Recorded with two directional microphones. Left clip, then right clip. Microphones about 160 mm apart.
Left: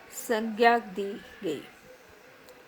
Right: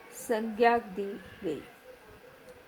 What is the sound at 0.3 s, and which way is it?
Speech, 40° left (ahead or behind).